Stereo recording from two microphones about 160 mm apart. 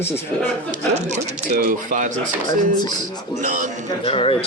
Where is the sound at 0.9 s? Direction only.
45° right (ahead or behind).